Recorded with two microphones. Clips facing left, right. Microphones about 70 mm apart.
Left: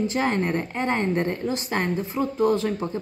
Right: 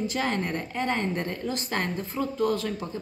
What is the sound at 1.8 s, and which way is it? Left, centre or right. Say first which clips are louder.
Speech: left 6 dB; centre.